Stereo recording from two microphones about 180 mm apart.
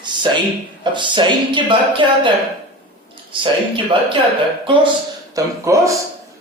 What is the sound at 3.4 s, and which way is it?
Speech, 30° right (ahead or behind).